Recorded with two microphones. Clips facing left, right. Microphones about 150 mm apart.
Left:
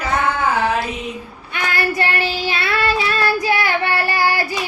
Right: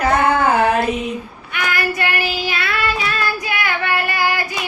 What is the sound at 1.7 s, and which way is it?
Child singing, 30° left (ahead or behind).